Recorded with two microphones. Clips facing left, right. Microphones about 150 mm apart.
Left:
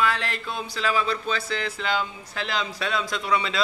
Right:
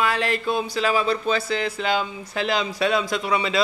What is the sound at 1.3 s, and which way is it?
Speech, 10° right (ahead or behind).